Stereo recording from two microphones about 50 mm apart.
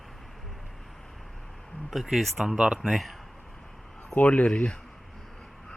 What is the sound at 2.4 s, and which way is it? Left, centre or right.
Speech, centre.